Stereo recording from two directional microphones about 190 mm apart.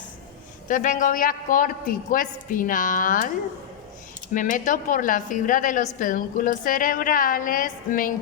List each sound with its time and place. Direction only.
0.7 s a woman's voice: 45° left (ahead or behind)
4.4 s a woman's voice: 45° left (ahead or behind)